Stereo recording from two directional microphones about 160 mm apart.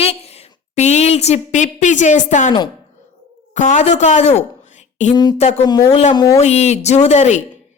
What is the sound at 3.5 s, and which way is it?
A woman's voice, 50° left (ahead or behind).